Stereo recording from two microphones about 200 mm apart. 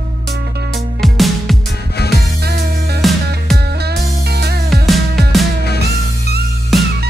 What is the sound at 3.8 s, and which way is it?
Music, 55° right (ahead or behind).